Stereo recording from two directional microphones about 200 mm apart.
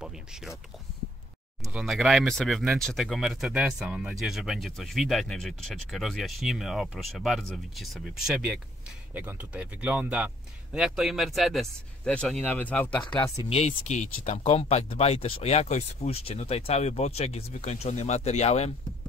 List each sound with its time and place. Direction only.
0.0 s a sound: 5° right (ahead or behind)
1.7 s speech: 5° right (ahead or behind)
13.0 s speech: 25° left (ahead or behind)